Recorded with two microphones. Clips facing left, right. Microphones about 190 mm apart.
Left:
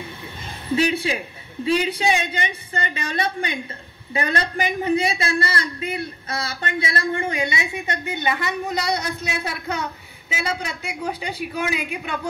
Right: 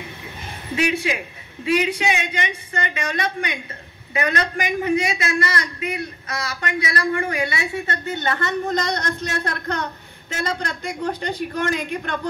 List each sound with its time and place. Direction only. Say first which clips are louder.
0.7 s a woman's voice: left 1 dB; 30° left (ahead or behind); by 12.2 s 5° left (ahead or behind)